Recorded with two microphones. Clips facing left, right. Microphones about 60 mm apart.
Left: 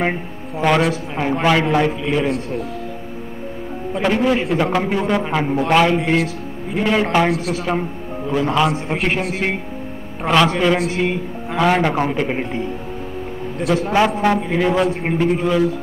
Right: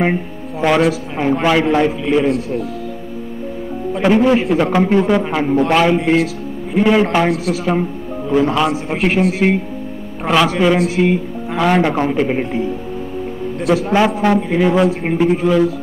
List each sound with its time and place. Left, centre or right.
0.6 s a man's voice: centre
3.9 s a man's voice: centre
13.8 s a man's voice: centre